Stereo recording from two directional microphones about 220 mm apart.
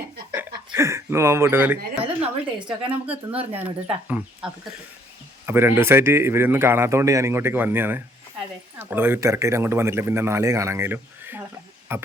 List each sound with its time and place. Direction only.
0.3 s speech: 10° right (ahead or behind)
2.0 s a woman's voice: 25° right (ahead or behind)
3.5 s a man's voice: 5° right (ahead or behind)
5.5 s a man's voice: 10° right (ahead or behind)